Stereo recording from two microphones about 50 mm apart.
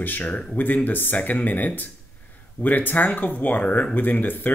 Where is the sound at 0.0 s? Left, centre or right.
Left.